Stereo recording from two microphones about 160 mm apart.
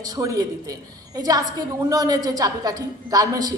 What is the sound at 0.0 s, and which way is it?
A woman's voice, 25° right (ahead or behind).